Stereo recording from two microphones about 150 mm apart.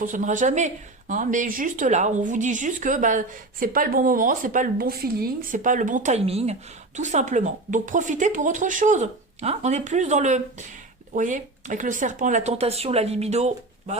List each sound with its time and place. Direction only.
0.0 s speech: 60° right (ahead or behind)
5.5 s speech: 60° right (ahead or behind)